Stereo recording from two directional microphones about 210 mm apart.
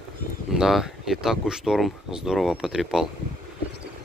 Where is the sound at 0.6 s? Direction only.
Centre (ahead or behind).